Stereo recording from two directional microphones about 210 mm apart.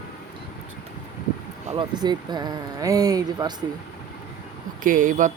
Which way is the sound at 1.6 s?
20° right (ahead or behind).